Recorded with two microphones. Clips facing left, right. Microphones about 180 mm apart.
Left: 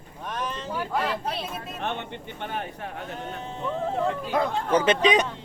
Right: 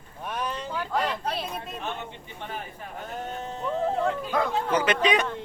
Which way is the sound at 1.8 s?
65° left (ahead or behind).